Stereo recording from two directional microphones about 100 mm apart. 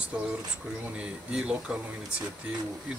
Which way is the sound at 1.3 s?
10° right (ahead or behind).